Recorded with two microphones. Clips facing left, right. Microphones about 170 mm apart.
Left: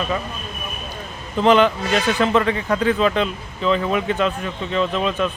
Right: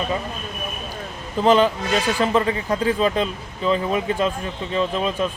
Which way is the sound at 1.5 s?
35° right (ahead or behind).